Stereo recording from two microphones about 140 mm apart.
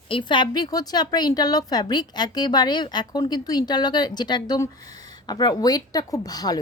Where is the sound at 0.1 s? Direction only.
35° left (ahead or behind).